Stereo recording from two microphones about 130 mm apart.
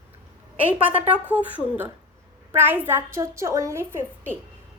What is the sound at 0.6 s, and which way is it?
A woman's voice, 10° right (ahead or behind).